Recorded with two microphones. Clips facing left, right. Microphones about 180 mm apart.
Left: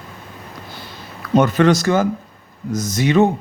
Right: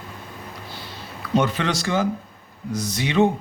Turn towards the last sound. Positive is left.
turn(degrees=45)  # may be behind; listen again after turning